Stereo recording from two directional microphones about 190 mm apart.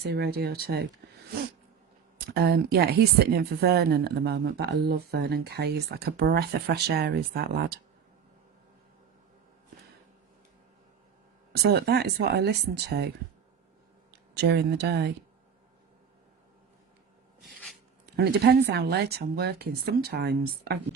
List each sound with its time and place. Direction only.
0.0 s speech: 60° right (ahead or behind)
2.1 s speech: 55° right (ahead or behind)
11.5 s speech: 60° right (ahead or behind)
14.1 s speech: 60° right (ahead or behind)
17.4 s a sound: centre (ahead or behind)
18.0 s speech: 60° right (ahead or behind)